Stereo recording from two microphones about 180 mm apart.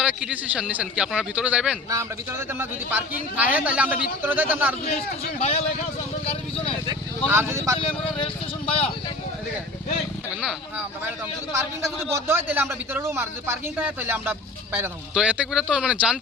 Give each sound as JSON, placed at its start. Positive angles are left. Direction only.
{"t": 0.0, "sound": "a man's voice", "side_deg": -5}
{"t": 5.4, "sound": "speech", "side_deg": 35}
{"t": 7.3, "sound": "a man's voice", "side_deg": -15}
{"t": 7.8, "sound": "speech", "side_deg": 30}
{"t": 10.4, "sound": "a man's voice", "side_deg": -10}